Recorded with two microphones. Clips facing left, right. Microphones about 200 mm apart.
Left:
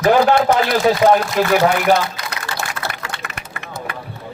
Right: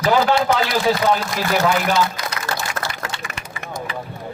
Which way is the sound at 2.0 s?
60° left (ahead or behind).